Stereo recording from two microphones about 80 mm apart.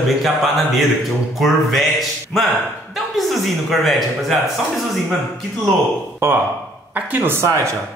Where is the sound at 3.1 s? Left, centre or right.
Centre.